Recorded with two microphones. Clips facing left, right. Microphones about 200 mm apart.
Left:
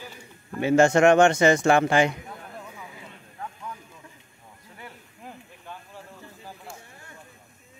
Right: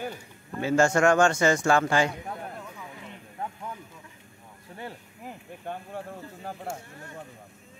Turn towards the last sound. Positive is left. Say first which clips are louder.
# right 7 dB
turn(degrees=-55)  # may be behind; listen again after turning